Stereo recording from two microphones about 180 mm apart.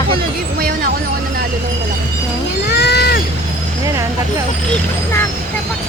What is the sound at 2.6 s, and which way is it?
Cat, 70° left (ahead or behind).